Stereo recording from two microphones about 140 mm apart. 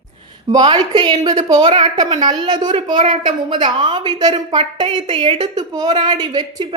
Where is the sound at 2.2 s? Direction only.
30° right (ahead or behind).